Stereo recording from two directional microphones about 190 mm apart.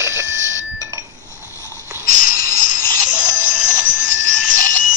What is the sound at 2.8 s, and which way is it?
Music, 20° right (ahead or behind).